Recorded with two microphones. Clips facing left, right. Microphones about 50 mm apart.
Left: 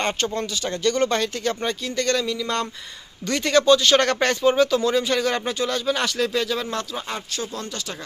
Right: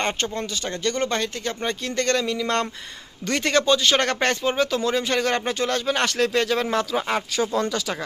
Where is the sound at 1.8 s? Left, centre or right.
Right.